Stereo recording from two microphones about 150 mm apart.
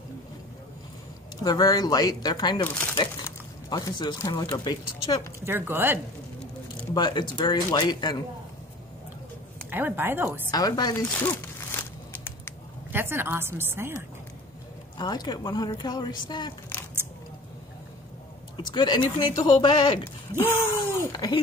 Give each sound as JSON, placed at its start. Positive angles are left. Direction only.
{"t": 1.4, "sound": "speech", "side_deg": 25}
{"t": 3.7, "sound": "speech", "side_deg": 30}
{"t": 5.4, "sound": "a woman's voice", "side_deg": -15}
{"t": 6.9, "sound": "speech", "side_deg": 30}
{"t": 9.7, "sound": "a woman's voice", "side_deg": -15}
{"t": 10.5, "sound": "speech", "side_deg": 25}
{"t": 11.2, "sound": "a sound", "side_deg": 15}
{"t": 12.9, "sound": "a woman's voice", "side_deg": -15}
{"t": 15.0, "sound": "speech", "side_deg": 30}
{"t": 18.6, "sound": "speech", "side_deg": 30}
{"t": 20.3, "sound": "speech", "side_deg": 15}